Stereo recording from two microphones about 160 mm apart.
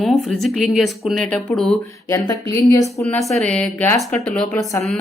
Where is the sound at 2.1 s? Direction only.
25° left (ahead or behind).